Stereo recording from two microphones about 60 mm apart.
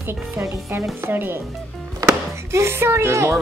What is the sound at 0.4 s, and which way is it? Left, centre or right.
Speech, right.